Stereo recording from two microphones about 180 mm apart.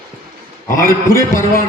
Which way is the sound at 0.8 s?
15° left (ahead or behind).